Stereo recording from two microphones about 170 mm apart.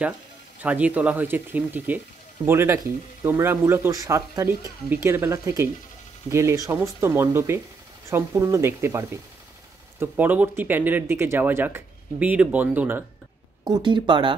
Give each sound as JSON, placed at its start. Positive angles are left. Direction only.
{"t": 0.6, "sound": "speech", "side_deg": -10}
{"t": 13.7, "sound": "speech", "side_deg": -25}